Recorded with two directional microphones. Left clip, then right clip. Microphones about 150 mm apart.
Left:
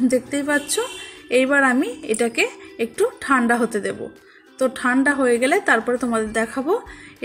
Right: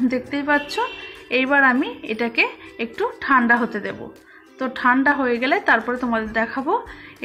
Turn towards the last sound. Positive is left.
turn(degrees=30)  # may be behind; listen again after turning